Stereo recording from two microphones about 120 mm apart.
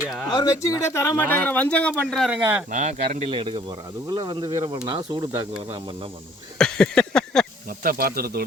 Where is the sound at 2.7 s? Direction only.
80° right.